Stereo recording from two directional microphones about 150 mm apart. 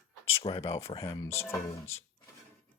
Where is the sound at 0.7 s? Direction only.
20° left (ahead or behind).